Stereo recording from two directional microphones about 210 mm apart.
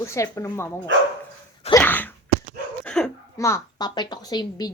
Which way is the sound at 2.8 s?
5° left (ahead or behind).